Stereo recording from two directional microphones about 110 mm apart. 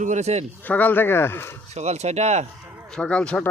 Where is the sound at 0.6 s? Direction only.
15° left (ahead or behind).